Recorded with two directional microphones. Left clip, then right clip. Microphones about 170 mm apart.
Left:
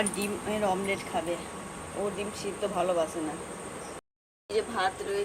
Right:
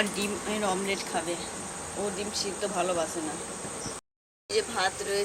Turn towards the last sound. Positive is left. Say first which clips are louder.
# right 1 dB
turn(degrees=5)  # may be behind; listen again after turning